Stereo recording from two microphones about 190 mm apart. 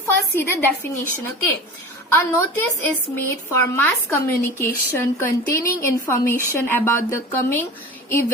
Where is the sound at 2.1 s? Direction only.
10° left (ahead or behind).